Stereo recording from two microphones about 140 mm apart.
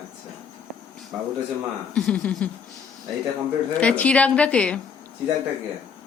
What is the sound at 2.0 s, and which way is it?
Speech, 10° left (ahead or behind).